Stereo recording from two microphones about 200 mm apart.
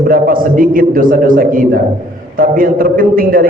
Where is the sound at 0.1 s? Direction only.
45° right (ahead or behind).